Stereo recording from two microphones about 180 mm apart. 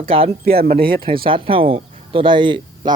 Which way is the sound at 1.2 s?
30° right (ahead or behind).